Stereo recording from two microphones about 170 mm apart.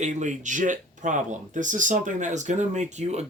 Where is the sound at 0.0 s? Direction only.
45° right (ahead or behind).